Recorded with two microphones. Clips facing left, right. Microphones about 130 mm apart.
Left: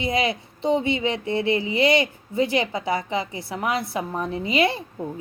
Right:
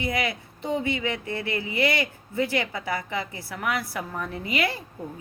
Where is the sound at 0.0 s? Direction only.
20° left (ahead or behind).